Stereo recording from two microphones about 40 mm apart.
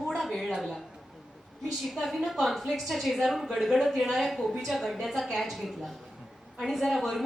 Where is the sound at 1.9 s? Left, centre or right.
Centre.